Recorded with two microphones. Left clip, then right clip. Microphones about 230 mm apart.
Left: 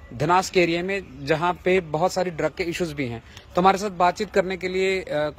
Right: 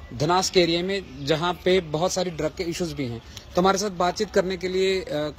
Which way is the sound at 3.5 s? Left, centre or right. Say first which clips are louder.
Left 2 dB; centre.